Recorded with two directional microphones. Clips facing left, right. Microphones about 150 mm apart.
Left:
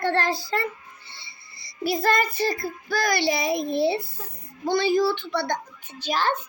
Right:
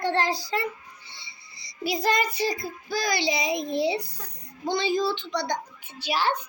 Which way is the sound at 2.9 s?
55° left (ahead or behind).